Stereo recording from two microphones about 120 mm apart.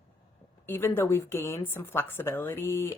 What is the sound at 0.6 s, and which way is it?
A woman's voice, 20° left (ahead or behind).